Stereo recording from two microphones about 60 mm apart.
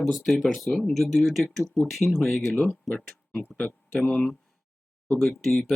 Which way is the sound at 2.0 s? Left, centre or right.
Left.